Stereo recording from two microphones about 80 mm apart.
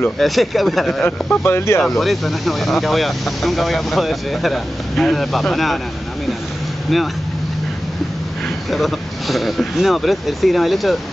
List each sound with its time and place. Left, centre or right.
0.2 s speech: centre
1.0 s speech: left
1.8 s speech: centre
8.6 s speech: centre